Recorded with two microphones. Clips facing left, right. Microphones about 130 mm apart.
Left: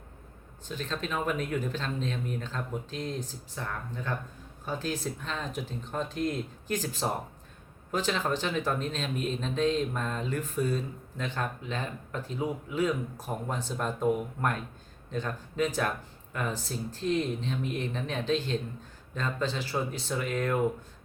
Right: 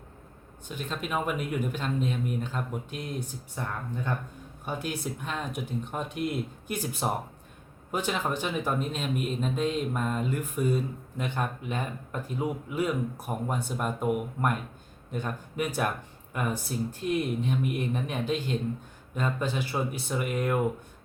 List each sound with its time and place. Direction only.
0.7 s speech: 10° right (ahead or behind)